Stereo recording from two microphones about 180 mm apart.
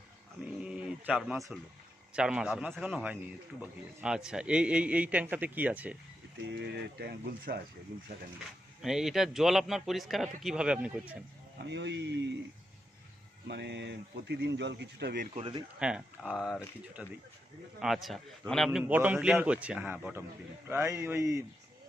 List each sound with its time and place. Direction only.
0.4 s a sound: 5° right (ahead or behind)
2.1 s a man's voice: 5° right (ahead or behind)
6.5 s speech: 70° right (ahead or behind)
8.8 s a man's voice: centre (ahead or behind)
11.6 s a man's voice: 75° right (ahead or behind)
13.5 s a man's voice: 70° right (ahead or behind)
15.4 s speech: 30° right (ahead or behind)
15.8 s a man's voice: 5° right (ahead or behind)